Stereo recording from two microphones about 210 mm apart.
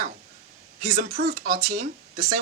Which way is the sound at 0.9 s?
45° right (ahead or behind).